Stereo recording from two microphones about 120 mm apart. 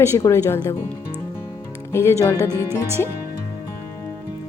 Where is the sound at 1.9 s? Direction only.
20° left (ahead or behind).